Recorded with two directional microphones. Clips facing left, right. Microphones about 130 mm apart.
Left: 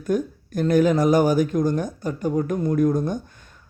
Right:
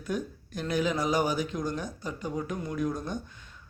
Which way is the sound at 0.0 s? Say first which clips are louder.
Left 9 dB; 45° left (ahead or behind).